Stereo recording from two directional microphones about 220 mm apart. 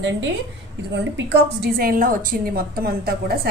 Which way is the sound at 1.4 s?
40° right (ahead or behind).